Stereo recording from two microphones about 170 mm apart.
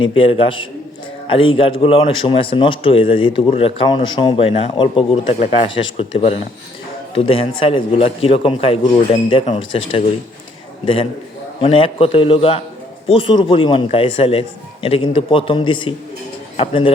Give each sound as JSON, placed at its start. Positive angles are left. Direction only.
{"t": 0.0, "sound": "a man's voice", "side_deg": 30}